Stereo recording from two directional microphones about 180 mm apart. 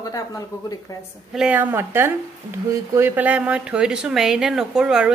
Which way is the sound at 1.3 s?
5° right (ahead or behind).